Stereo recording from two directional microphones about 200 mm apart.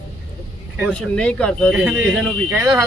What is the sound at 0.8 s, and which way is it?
Speech, 5° left (ahead or behind).